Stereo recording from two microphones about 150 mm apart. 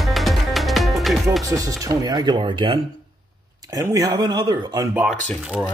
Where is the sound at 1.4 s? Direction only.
20° right (ahead or behind).